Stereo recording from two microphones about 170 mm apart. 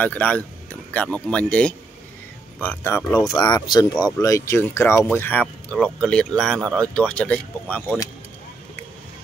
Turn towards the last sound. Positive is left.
turn(degrees=10)  # may be behind; listen again after turning